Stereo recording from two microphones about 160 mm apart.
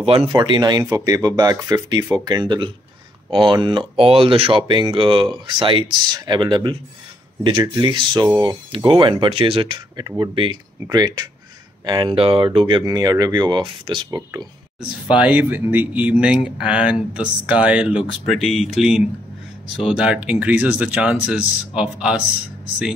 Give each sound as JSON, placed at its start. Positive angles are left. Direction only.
{"t": 0.3, "sound": "speech", "side_deg": -25}
{"t": 14.8, "sound": "speech", "side_deg": -5}